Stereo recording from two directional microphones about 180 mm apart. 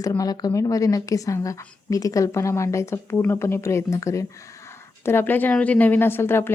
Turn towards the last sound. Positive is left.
turn(degrees=15)  # may be behind; listen again after turning